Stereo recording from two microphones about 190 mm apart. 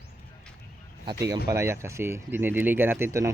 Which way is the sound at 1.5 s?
15° right (ahead or behind).